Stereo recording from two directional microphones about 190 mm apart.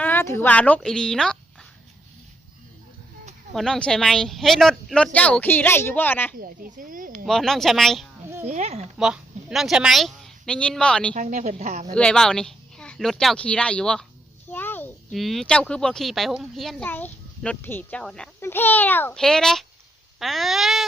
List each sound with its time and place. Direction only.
0.0 s a woman's voice: 10° left (ahead or behind)
3.5 s a child's voice: centre (ahead or behind)
6.4 s speech: 45° right (ahead or behind)
7.3 s a child's voice: centre (ahead or behind)
8.4 s a woman's voice: 35° right (ahead or behind)
9.0 s a woman's voice: centre (ahead or behind)
11.1 s a woman's voice: 40° right (ahead or behind)
11.9 s speech: 5° left (ahead or behind)
14.5 s a sound: 10° left (ahead or behind)
15.1 s a child's voice: centre (ahead or behind)